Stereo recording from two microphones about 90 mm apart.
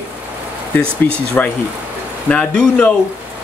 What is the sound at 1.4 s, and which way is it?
Speech, 15° left (ahead or behind).